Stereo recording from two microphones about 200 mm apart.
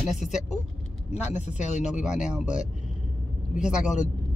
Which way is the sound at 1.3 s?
35° left (ahead or behind).